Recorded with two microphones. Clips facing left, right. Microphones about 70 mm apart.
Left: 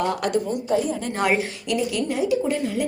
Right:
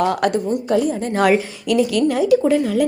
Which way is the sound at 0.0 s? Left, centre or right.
Right.